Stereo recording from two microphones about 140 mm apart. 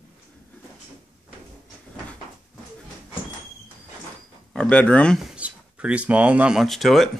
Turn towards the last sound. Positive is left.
turn(degrees=0)  # may be behind; listen again after turning